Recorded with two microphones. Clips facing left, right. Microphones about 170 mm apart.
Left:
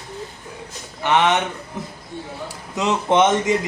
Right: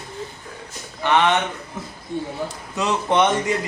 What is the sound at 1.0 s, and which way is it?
Speech, 15° left (ahead or behind).